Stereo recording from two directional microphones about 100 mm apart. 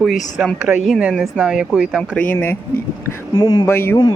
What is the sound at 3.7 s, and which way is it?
Speech, 25° left (ahead or behind).